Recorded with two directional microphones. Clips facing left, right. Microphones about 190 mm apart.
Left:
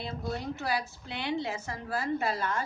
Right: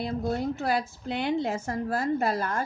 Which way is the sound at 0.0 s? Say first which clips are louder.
Right 7 dB; 50° right (ahead or behind).